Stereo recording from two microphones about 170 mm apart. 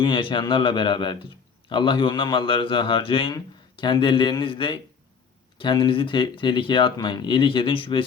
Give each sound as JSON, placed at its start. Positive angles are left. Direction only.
{"t": 0.0, "sound": "a man's voice", "side_deg": 30}